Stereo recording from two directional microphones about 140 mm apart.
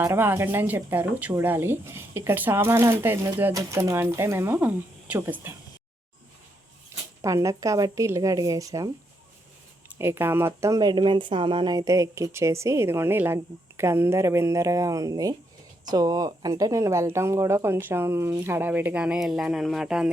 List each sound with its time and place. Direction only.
0.0 s speech: 15° right (ahead or behind)
7.2 s speech: 20° right (ahead or behind)
10.0 s speech: 15° right (ahead or behind)